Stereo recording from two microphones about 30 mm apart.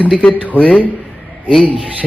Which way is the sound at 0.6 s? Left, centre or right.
Left.